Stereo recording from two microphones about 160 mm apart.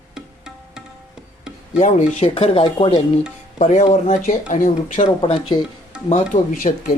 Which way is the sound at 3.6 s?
50° left (ahead or behind).